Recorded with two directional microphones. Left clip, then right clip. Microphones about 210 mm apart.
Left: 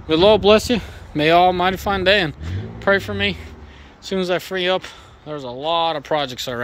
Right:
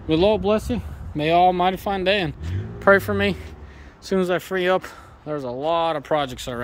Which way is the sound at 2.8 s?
25° right (ahead or behind).